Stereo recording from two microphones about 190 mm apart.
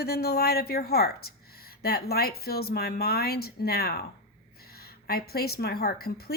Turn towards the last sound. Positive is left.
turn(degrees=55)  # may be behind; listen again after turning